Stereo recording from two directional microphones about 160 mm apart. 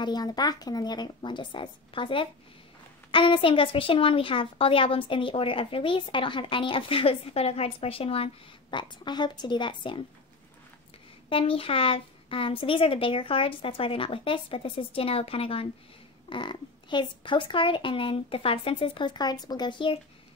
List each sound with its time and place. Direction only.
0.0 s a woman's voice: 25° left (ahead or behind)
11.2 s a woman's voice: 35° left (ahead or behind)